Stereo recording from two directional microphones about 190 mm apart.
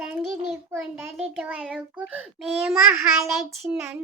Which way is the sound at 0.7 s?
10° right (ahead or behind).